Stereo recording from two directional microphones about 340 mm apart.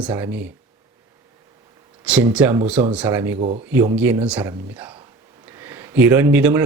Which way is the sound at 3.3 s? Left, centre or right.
Centre.